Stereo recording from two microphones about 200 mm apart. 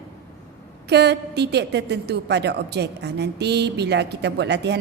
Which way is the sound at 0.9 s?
55° right (ahead or behind).